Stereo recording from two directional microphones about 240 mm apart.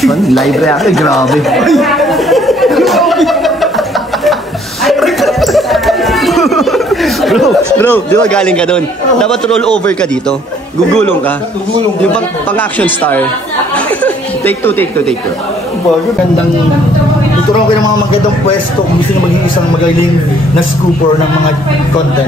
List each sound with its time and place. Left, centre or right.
0.0 s speech: centre
4.8 s chatter: centre
12.0 s speech: centre